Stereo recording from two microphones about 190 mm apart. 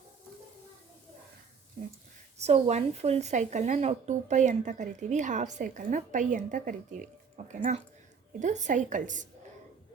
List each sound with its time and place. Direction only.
2.4 s a woman's voice: 35° right (ahead or behind)